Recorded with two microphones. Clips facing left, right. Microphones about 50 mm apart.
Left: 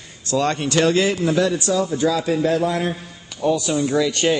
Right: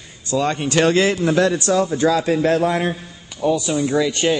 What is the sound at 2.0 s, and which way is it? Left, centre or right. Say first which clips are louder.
Speech: right 2 dB; right.